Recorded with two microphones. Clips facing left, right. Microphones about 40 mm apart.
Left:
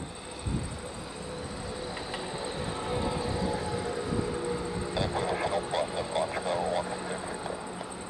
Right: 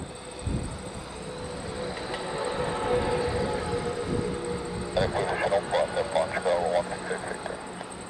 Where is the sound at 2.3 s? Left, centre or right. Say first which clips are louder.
Right 5 dB; right.